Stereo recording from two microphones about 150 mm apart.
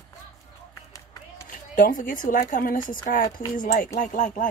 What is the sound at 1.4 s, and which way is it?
Speech, 65° left (ahead or behind).